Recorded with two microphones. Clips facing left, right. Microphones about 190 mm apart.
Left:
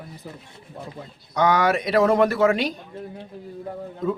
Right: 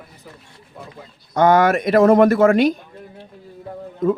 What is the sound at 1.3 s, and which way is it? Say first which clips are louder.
Speech: right 5 dB; 50° right (ahead or behind).